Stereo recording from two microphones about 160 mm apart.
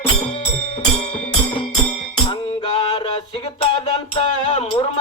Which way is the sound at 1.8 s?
35° left (ahead or behind).